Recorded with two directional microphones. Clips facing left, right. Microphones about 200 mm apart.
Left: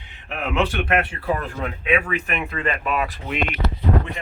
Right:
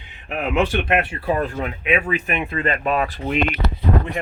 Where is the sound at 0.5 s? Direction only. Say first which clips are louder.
Right 2 dB; 20° right (ahead or behind).